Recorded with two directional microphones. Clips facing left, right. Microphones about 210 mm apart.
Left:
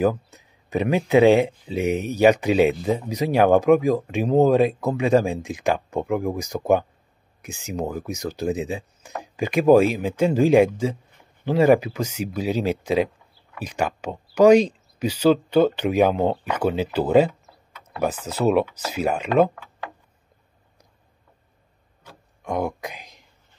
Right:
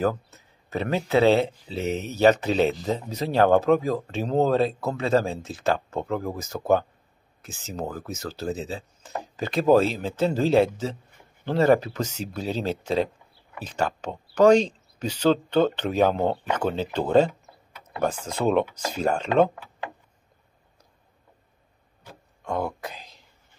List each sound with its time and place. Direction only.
0.0 s speech: 15° left (ahead or behind)
22.4 s speech: 15° left (ahead or behind)